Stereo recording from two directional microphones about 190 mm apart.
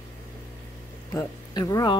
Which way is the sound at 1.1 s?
20° left (ahead or behind).